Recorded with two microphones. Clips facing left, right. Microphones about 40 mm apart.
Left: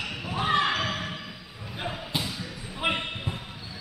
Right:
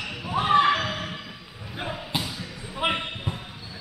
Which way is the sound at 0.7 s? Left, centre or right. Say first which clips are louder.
Right 4 dB; centre.